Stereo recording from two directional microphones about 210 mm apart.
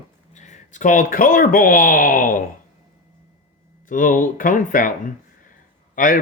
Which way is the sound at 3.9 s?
40° left (ahead or behind).